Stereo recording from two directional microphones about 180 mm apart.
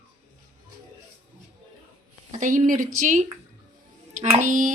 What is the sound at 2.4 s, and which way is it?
Speech, 45° right (ahead or behind).